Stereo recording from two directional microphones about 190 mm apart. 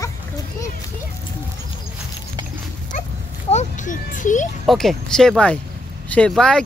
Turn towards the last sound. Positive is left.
turn(degrees=5)  # may be behind; listen again after turning